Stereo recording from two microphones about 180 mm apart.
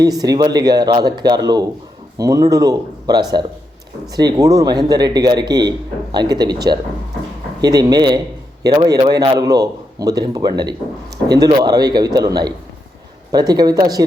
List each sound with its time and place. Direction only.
0.0 s a man's voice: 20° right (ahead or behind)